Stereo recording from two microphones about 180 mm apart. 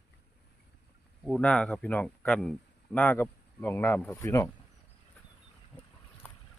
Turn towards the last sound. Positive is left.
turn(degrees=10)  # may be behind; listen again after turning